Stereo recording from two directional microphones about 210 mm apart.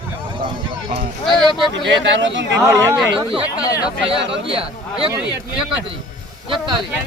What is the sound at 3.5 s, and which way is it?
Speech, 15° left (ahead or behind).